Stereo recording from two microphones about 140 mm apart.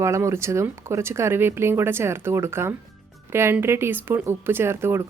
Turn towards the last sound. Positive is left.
turn(degrees=-15)  # may be behind; listen again after turning